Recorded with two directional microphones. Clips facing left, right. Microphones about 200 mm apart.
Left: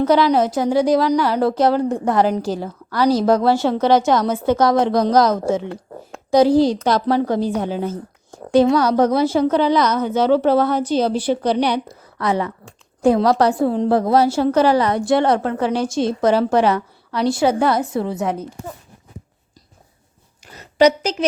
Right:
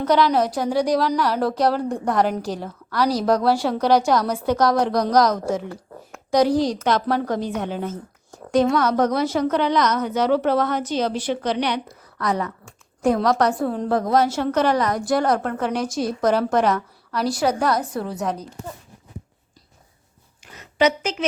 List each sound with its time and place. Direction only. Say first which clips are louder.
0.0 s a woman's voice: left 3 dB; 5° left (ahead or behind)
5.1 s a woman's voice: left 3 dB; 25° left (ahead or behind)
20.5 s a sound: left 5 dB; 40° left (ahead or behind)